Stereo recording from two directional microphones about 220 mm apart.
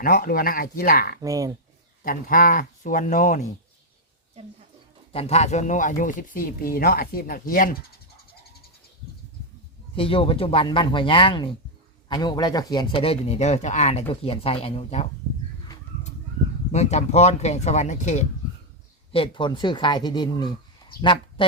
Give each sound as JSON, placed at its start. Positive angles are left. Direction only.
{"t": 0.0, "sound": "speech", "side_deg": 40}
{"t": 1.2, "sound": "speech", "side_deg": -15}
{"t": 2.0, "sound": "speech", "side_deg": 40}
{"t": 5.1, "sound": "speech", "side_deg": 30}
{"t": 9.9, "sound": "speech", "side_deg": 25}
{"t": 16.7, "sound": "speech", "side_deg": 30}
{"t": 19.1, "sound": "speech", "side_deg": 25}